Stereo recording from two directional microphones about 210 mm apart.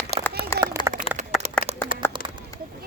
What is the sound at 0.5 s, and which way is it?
Clapping, 15° left (ahead or behind).